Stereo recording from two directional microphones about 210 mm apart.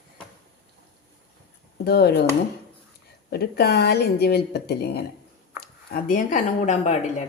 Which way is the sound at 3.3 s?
50° left (ahead or behind).